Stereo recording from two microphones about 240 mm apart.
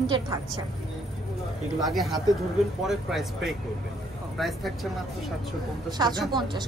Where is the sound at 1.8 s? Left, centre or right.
Centre.